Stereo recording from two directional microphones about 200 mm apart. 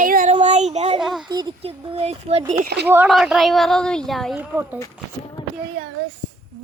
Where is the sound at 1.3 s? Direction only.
20° right (ahead or behind).